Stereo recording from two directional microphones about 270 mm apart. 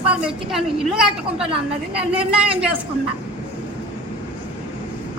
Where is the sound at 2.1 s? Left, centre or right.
Centre.